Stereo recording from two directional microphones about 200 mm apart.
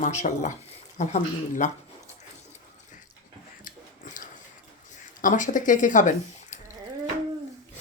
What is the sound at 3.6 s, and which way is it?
Dog, 40° left (ahead or behind).